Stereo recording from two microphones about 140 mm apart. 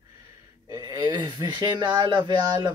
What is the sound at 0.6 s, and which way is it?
Speech, 25° right (ahead or behind).